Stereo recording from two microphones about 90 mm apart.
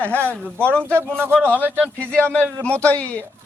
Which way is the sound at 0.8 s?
30° right (ahead or behind).